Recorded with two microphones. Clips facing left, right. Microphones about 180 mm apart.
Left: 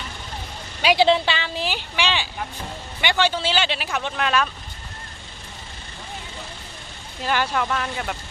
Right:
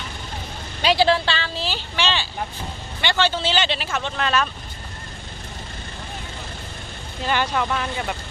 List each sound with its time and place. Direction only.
0.9 s speech: 20° left (ahead or behind)
7.2 s speech: 5° left (ahead or behind)